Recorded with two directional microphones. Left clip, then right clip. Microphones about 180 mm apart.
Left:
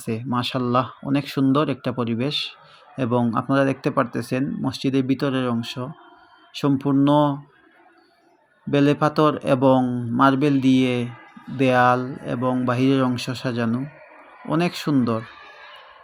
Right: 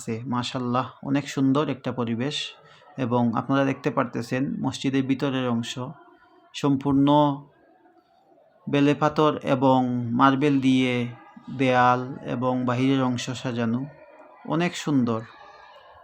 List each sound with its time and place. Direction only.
0.0 s speech: 20° left (ahead or behind)
8.7 s speech: 15° left (ahead or behind)